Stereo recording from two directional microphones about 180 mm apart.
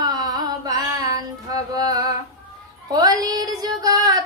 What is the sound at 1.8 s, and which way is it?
Music, 20° right (ahead or behind).